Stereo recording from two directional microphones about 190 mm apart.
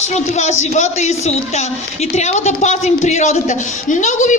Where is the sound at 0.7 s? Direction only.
35° left (ahead or behind).